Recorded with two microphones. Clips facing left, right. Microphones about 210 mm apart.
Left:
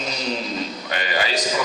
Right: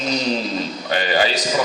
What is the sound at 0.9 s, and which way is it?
Speech, 30° right (ahead or behind).